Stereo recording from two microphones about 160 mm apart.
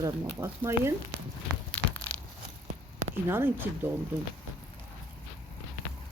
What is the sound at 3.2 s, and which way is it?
Speech, 15° right (ahead or behind).